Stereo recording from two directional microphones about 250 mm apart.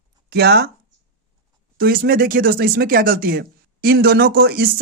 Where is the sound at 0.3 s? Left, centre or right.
Right.